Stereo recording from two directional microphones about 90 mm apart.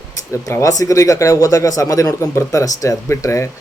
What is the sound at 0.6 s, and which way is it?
Speech, 40° left (ahead or behind).